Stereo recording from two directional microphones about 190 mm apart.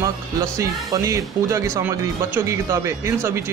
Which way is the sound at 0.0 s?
15° right (ahead or behind).